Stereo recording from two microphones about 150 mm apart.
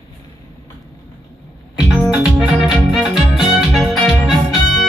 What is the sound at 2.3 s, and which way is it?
Music, 5° right (ahead or behind).